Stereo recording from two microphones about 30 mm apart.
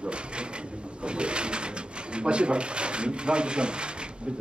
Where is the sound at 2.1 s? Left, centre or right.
Right.